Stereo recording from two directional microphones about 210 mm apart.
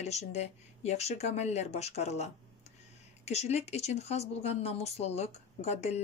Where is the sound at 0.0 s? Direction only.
30° left (ahead or behind).